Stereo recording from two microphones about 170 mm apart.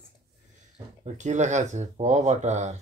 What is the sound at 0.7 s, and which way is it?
Speech, 40° right (ahead or behind).